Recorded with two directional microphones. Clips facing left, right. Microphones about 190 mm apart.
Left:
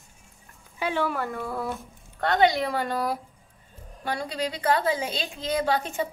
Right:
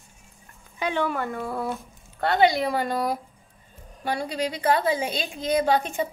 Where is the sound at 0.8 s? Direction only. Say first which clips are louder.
Right 1 dB; 5° left (ahead or behind).